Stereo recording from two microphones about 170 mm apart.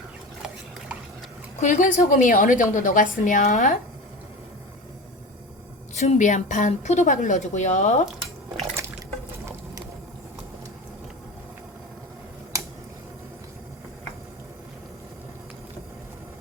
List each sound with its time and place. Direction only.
1.6 s a woman's voice: 45° left (ahead or behind)
5.9 s a woman's voice: 40° left (ahead or behind)